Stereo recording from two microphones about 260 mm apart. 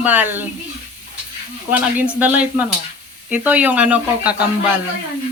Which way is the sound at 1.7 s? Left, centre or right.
Centre.